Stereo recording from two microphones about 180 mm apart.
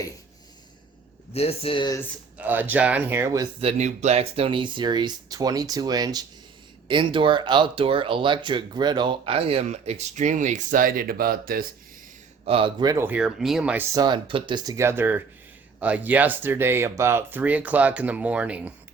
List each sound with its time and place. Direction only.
1.3 s speech: 35° left (ahead or behind)
2.4 s speech: 10° right (ahead or behind)
3.6 s speech: 35° right (ahead or behind); by 11.6 s 55° right (ahead or behind)
12.5 s speech: 30° right (ahead or behind); by 13.8 s 5° right (ahead or behind)
13.9 s speech: 25° right (ahead or behind); by 18.7 s 5° right (ahead or behind)